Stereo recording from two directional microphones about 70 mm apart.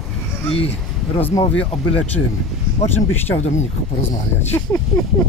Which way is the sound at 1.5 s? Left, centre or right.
Centre.